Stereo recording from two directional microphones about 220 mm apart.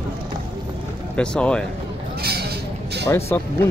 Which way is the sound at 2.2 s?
45° right (ahead or behind).